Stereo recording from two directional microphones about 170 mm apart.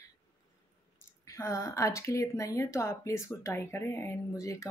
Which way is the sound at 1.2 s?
20° left (ahead or behind).